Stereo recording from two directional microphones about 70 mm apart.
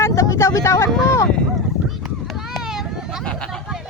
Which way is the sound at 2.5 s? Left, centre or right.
Centre.